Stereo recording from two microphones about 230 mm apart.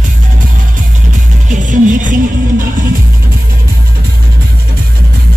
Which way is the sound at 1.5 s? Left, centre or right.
Right.